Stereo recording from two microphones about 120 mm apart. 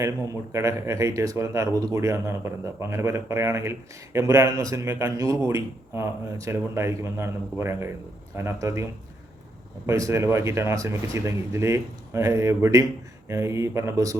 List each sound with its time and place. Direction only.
0.5 s speech: 25° right (ahead or behind)